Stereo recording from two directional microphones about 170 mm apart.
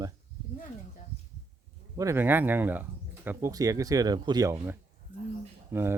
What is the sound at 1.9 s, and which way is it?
Speech, 20° right (ahead or behind).